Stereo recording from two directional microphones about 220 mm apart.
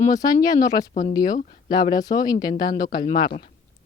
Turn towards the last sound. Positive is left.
turn(degrees=20)  # may be behind; listen again after turning